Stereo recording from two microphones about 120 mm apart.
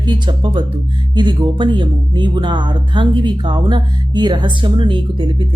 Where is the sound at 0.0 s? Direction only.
40° right (ahead or behind).